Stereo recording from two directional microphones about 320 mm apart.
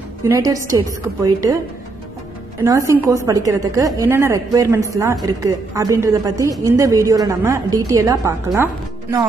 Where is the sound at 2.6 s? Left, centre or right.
Centre.